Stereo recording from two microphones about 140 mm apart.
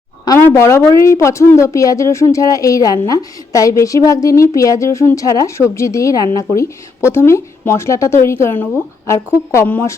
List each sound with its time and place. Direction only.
0.3 s speech: 15° left (ahead or behind)